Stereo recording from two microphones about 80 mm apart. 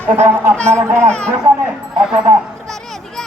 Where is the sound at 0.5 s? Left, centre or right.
Centre.